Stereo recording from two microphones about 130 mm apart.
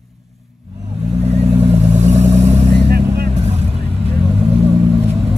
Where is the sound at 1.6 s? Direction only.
55° right (ahead or behind).